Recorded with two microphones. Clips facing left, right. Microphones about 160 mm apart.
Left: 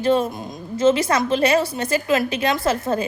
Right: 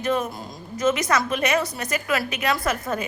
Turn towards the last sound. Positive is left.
turn(degrees=30)  # may be behind; listen again after turning